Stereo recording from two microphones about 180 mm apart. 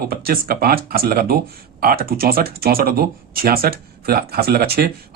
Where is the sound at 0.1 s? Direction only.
55° right (ahead or behind).